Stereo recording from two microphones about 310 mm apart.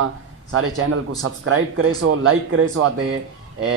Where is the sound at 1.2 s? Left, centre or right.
Right.